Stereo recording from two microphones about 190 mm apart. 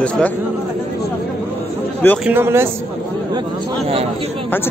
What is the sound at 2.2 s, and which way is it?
Speech, 10° right (ahead or behind).